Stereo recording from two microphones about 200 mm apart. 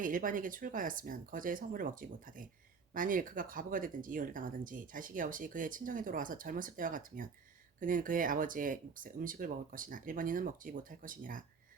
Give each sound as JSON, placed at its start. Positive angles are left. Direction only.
{"t": 0.0, "sound": "speech", "side_deg": -45}